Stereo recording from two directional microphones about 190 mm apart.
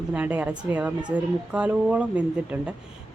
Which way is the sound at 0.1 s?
10° right (ahead or behind).